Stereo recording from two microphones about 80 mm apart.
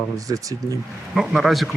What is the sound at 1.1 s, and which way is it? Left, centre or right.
Speech, centre.